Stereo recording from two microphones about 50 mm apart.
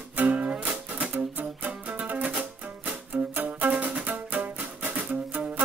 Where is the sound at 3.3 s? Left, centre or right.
Right.